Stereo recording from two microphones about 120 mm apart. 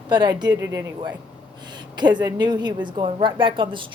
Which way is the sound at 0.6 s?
25° right (ahead or behind).